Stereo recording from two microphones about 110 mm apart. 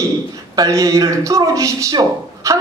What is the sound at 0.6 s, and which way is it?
A man's voice, 30° right (ahead or behind).